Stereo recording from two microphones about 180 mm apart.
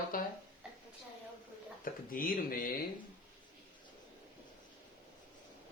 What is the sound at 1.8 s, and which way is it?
Speech, 50° left (ahead or behind).